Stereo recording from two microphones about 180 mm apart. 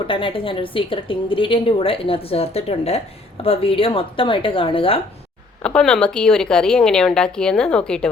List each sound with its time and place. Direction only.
0.1 s a woman's voice: 30° left (ahead or behind)
5.6 s speech: 5° left (ahead or behind)